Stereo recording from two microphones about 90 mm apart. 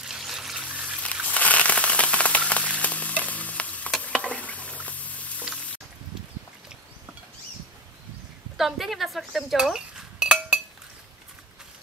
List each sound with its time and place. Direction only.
0.0 s water: 5° right (ahead or behind)
0.7 s trickle: 15° right (ahead or behind)
1.3 s a sound: 15° left (ahead or behind)
4.0 s stir: 15° left (ahead or behind)
4.8 s a sound: 15° left (ahead or behind)
8.5 s speech: centre (ahead or behind)